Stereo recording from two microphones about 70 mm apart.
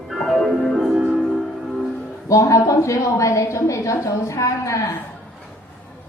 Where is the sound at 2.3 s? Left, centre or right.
Left.